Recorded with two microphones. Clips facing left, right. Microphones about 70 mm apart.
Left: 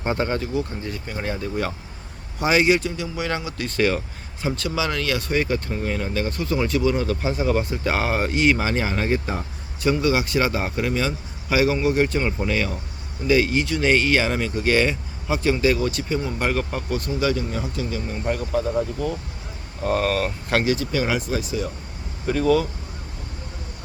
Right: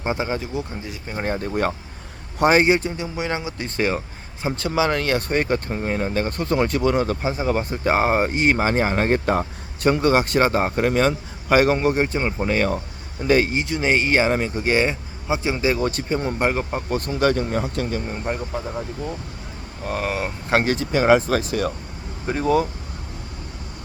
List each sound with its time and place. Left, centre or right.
0.0 s speech: centre
1.1 s speech: right
11.9 s speech: right
13.5 s speech: right
15.8 s speech: right
16.4 s speech: right
17.1 s speech: right
18.2 s speech: centre
19.8 s speech: centre
20.5 s speech: right
21.2 s speech: right
22.3 s speech: right